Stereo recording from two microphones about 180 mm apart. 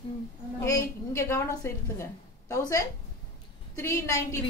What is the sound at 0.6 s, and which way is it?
A woman's voice, 15° left (ahead or behind).